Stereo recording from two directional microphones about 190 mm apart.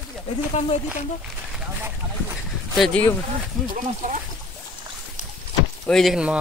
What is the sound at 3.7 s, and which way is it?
Speech, 35° right (ahead or behind).